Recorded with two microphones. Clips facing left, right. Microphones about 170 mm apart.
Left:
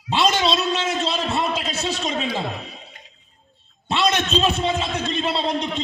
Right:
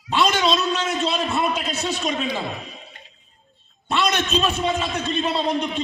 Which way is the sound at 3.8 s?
25° left (ahead or behind).